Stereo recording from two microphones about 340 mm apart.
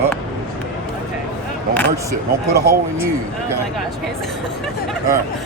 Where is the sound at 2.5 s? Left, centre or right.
Right.